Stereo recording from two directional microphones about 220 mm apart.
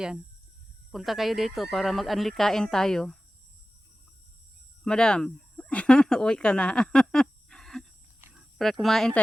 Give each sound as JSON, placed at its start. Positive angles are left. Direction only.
{"t": 0.9, "sound": "speech", "side_deg": 0}
{"t": 4.8, "sound": "speech", "side_deg": 5}
{"t": 8.2, "sound": "a sound", "side_deg": -5}
{"t": 8.8, "sound": "speech", "side_deg": 0}